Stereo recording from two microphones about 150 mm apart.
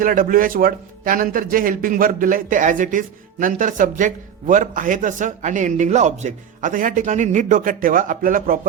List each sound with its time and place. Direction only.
0.0 s a man's voice: 65° right (ahead or behind)